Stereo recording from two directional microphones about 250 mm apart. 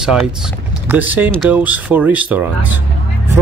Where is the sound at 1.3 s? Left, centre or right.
Centre.